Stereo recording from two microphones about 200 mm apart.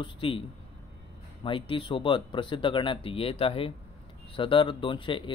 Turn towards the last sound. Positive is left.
turn(degrees=25)  # may be behind; listen again after turning